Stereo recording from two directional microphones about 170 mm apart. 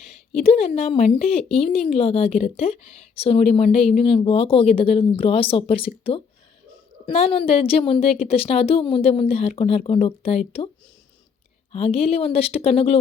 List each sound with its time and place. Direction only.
0.3 s a woman's voice: 35° left (ahead or behind)
11.7 s a woman's voice: 35° left (ahead or behind)